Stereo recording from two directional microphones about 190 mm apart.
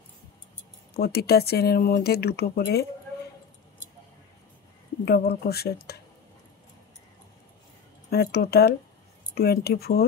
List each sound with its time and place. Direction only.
0.9 s speech: 55° left (ahead or behind)
5.0 s speech: 55° left (ahead or behind)
8.1 s speech: 55° left (ahead or behind)